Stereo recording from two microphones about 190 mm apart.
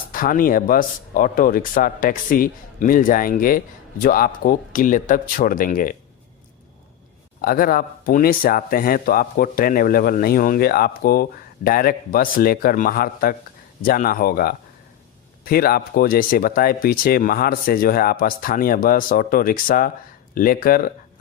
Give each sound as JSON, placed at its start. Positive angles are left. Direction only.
{"t": 0.1, "sound": "speech", "side_deg": 45}
{"t": 7.4, "sound": "speech", "side_deg": 50}